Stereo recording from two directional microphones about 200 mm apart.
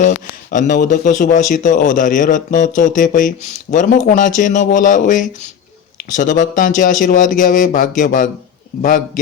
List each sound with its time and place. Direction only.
0.5 s a man's voice: 40° left (ahead or behind)